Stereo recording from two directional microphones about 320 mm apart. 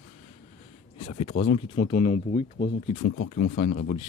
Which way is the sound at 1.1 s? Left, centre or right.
Left.